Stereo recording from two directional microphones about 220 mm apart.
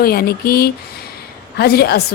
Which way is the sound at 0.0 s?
45° left (ahead or behind).